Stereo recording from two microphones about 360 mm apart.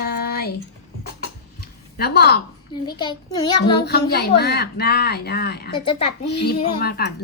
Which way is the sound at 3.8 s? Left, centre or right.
Left.